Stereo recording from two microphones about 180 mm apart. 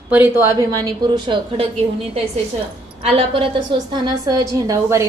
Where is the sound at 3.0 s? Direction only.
30° right (ahead or behind).